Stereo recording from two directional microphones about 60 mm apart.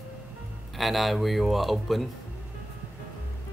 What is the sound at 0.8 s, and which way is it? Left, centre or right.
Speech, centre.